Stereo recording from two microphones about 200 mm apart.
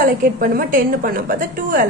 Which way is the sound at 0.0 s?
45° right (ahead or behind).